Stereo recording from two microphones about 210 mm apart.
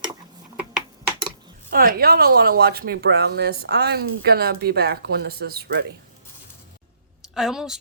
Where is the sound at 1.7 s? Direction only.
45° right (ahead or behind).